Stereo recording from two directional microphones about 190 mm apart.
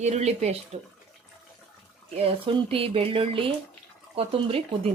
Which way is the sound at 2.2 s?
30° right (ahead or behind).